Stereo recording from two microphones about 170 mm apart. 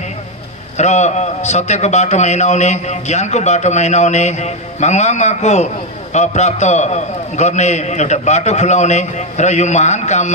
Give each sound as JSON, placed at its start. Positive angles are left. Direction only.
{"t": 0.7, "sound": "a man's voice", "side_deg": 40}